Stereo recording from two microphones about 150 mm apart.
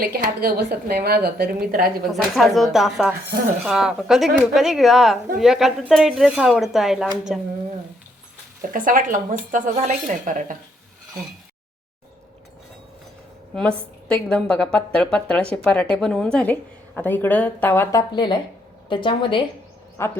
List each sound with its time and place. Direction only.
0.0 s a woman's voice: 90° right
2.0 s speech: centre (ahead or behind)
8.7 s a woman's voice: 65° right (ahead or behind)
13.6 s a woman's voice: 5° left (ahead or behind)
18.1 s speech: 30° left (ahead or behind)
20.0 s a woman's voice: 15° left (ahead or behind)